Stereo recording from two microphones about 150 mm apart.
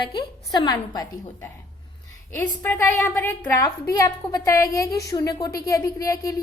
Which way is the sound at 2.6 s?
20° left (ahead or behind).